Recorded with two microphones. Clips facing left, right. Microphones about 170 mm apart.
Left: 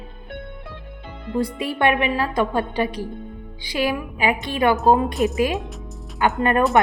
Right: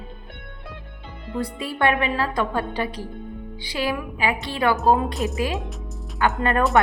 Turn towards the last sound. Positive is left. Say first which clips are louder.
# left 2 dB
turn(degrees=15)  # may be behind; listen again after turning